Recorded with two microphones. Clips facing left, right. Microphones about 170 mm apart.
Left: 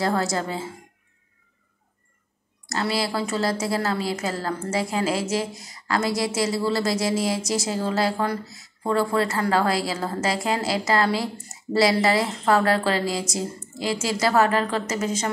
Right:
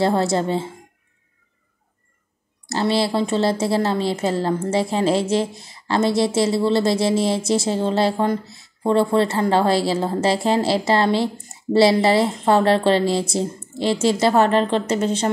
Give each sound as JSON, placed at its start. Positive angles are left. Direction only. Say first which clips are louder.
{"t": 0.0, "sound": "speech", "louder": "right 5 dB", "side_deg": -25}
{"t": 2.7, "sound": "speech", "louder": "right 6 dB", "side_deg": -25}